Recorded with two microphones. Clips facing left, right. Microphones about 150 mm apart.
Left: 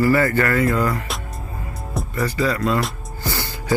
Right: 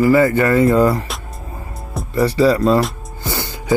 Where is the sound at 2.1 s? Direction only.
25° right (ahead or behind).